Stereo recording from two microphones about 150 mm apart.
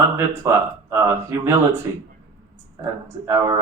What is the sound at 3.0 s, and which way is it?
Speech, 20° right (ahead or behind).